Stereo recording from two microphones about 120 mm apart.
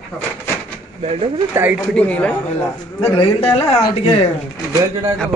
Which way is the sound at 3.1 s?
50° left (ahead or behind).